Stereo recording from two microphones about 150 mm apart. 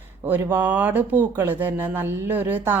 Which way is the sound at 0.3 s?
15° right (ahead or behind).